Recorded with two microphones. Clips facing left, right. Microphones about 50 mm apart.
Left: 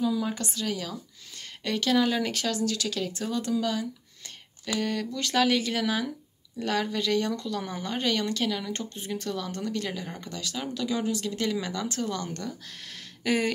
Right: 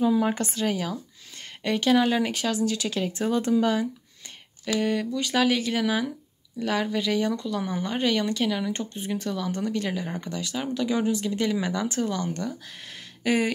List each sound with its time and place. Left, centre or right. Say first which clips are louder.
0.0 s speech: right 5 dB; right
4.7 s speech: right 4 dB; centre
12.1 s speech: right 4 dB; centre
13.2 s a sound: right 2 dB; centre